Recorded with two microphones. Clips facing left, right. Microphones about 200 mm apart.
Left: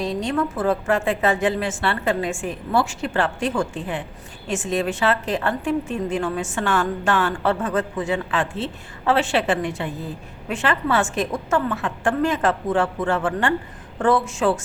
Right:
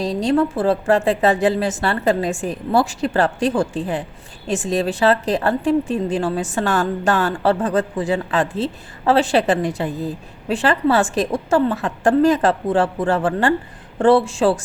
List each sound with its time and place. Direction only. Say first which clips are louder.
0.0 s a woman's voice: right 5 dB; 35° right (ahead or behind)